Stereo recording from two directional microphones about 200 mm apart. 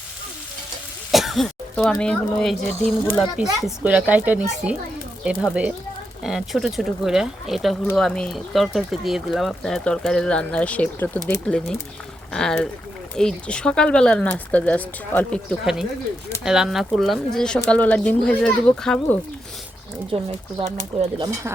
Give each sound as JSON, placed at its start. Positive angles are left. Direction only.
{"t": 1.1, "sound": "speech", "side_deg": 0}
{"t": 15.6, "sound": "speech", "side_deg": 0}
{"t": 20.1, "sound": "speech", "side_deg": -25}